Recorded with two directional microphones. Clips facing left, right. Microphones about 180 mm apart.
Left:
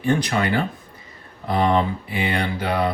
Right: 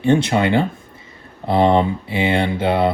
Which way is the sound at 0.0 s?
25° right (ahead or behind).